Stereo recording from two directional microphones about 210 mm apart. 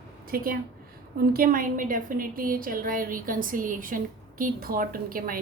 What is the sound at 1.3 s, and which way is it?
A woman's voice, 40° right (ahead or behind).